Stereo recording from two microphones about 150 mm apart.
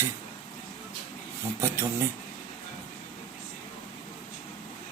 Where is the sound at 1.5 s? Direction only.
20° right (ahead or behind).